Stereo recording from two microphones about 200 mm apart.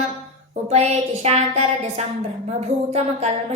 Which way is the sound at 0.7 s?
35° right (ahead or behind).